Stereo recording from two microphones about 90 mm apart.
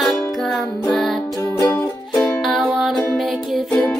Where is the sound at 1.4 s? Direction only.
30° left (ahead or behind).